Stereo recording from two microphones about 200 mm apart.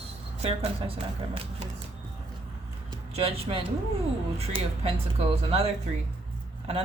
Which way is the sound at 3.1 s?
30° right (ahead or behind).